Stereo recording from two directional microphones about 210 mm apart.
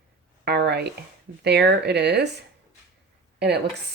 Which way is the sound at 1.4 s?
50° right (ahead or behind).